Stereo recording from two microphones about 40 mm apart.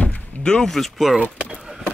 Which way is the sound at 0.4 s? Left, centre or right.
Left.